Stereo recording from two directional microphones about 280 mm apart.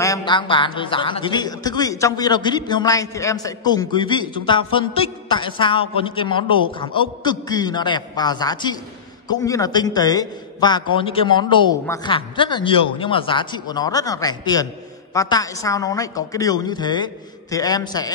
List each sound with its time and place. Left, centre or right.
0.0 s a man's voice: centre